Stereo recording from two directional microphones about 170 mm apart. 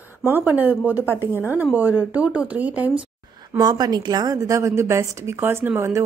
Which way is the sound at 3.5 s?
25° right (ahead or behind).